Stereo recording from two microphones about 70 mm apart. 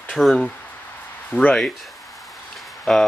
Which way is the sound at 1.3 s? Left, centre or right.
Centre.